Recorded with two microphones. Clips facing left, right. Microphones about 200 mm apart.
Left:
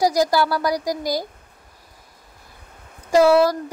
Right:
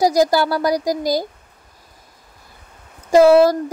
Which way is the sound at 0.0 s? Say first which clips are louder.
Right 3 dB; 25° right (ahead or behind).